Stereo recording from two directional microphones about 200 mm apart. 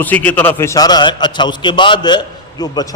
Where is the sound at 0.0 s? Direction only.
10° left (ahead or behind).